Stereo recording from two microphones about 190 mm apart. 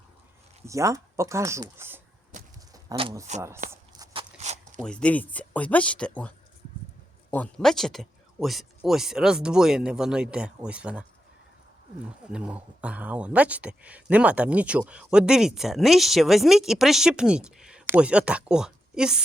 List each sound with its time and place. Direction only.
0.6 s speech: 15° right (ahead or behind)
2.9 s speech: 30° right (ahead or behind)
3.7 s walk: 20° right (ahead or behind); by 4.8 s 35° right (ahead or behind)
4.8 s speech: 5° left (ahead or behind)
12.3 s speech: 5° right (ahead or behind)